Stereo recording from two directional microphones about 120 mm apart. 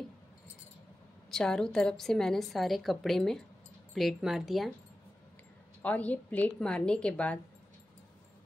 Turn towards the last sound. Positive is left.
turn(degrees=10)  # may be behind; listen again after turning